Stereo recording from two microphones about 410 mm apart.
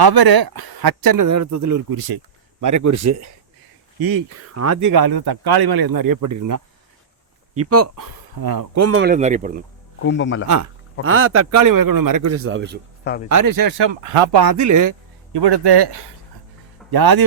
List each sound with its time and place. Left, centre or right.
0.0 s speech: right
4.0 s speech: right
4.4 s speech: right
7.5 s speech: right
8.7 s a man's voice: right
9.0 s speech: centre
10.0 s speech: left
10.4 s speech: right
11.0 s a man's voice: right
13.2 s speech: right
14.4 s speech: right
15.3 s speech: right
16.9 s speech: right